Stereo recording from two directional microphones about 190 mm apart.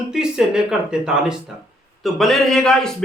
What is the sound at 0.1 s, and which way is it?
A man's voice, 5° right (ahead or behind).